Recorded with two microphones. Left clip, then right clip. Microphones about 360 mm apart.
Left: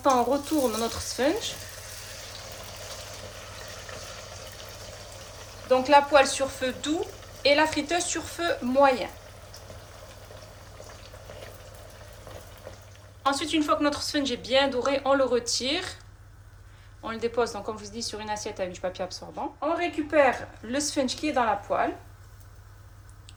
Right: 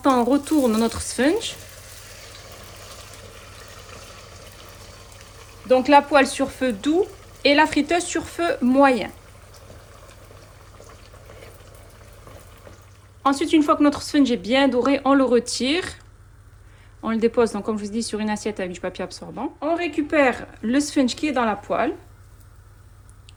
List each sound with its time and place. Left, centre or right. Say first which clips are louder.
0.0 s speech: right 4 dB; right
5.6 s speech: right 4 dB; right
13.2 s speech: right 7 dB; centre
17.1 s speech: right 8 dB; right